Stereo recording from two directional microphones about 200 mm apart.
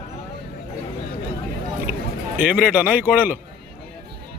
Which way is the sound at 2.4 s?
10° right (ahead or behind).